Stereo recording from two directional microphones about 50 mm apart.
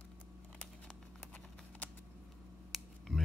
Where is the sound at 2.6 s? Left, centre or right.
Centre.